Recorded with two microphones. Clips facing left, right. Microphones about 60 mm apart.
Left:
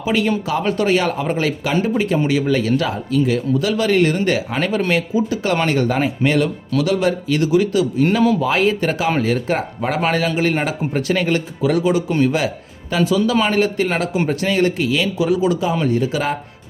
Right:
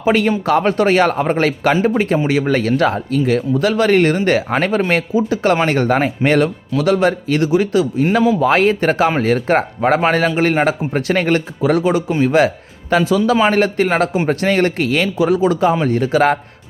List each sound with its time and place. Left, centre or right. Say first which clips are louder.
0.0 s speech: right 4 dB; right